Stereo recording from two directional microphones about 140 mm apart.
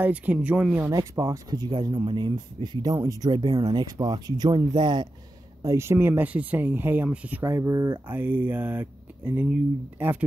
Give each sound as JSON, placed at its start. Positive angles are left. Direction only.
{"t": 0.0, "sound": "speech", "side_deg": -10}
{"t": 0.9, "sound": "speech", "side_deg": -25}
{"t": 5.6, "sound": "speech", "side_deg": -20}